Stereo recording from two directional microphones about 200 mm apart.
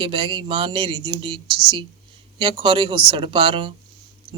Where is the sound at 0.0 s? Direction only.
25° right (ahead or behind).